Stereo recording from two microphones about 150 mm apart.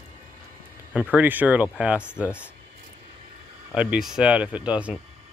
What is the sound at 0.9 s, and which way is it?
Speech, 10° right (ahead or behind).